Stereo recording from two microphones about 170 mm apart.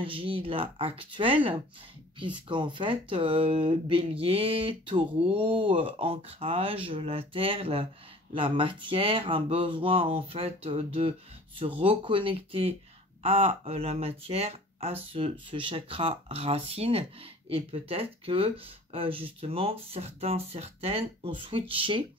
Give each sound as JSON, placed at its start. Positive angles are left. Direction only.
{"t": 0.0, "sound": "speech", "side_deg": -30}